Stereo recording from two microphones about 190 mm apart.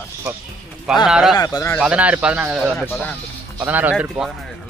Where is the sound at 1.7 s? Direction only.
5° right (ahead or behind).